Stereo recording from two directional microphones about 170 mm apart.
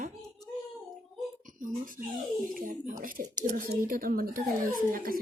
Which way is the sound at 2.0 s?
50° right (ahead or behind).